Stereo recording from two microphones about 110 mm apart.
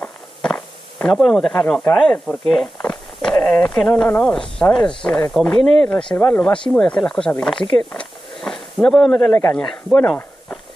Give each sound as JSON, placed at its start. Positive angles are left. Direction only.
{"t": 0.0, "sound": "a sound", "side_deg": 10}
{"t": 2.0, "sound": "speech", "side_deg": 5}
{"t": 9.3, "sound": "a man's voice", "side_deg": 20}